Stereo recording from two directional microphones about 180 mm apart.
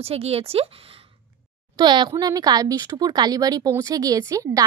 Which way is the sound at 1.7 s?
25° right (ahead or behind).